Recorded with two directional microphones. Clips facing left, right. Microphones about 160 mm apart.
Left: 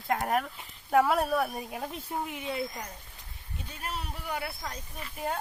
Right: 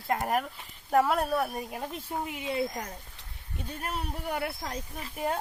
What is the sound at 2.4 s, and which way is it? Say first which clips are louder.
Speech: right 6 dB; 20° right (ahead or behind).